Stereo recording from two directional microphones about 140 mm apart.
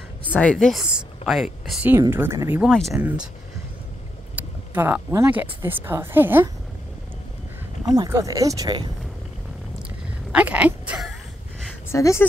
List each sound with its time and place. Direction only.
0.2 s speech: 10° left (ahead or behind)
1.9 s speech: 15° right (ahead or behind)
2.6 s speech: centre (ahead or behind)
4.4 s speech: 10° right (ahead or behind)
7.9 s speech: 25° right (ahead or behind)
10.3 s speech: 10° right (ahead or behind)
11.9 s speech: 20° left (ahead or behind)